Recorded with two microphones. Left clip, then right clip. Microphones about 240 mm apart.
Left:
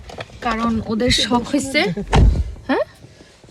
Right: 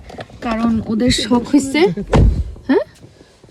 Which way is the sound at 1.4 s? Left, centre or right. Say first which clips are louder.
Right 6 dB; left.